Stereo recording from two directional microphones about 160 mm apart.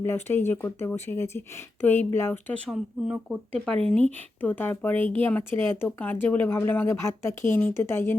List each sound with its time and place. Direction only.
0.0 s speech: 15° left (ahead or behind)
3.8 s speech: 10° left (ahead or behind)